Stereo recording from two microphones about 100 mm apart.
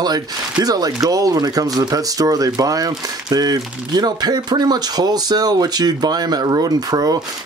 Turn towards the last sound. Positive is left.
turn(degrees=-40)  # may be behind; listen again after turning